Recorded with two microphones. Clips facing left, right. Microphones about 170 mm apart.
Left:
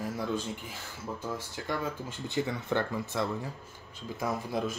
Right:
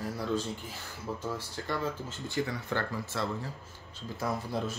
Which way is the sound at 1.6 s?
15° left (ahead or behind).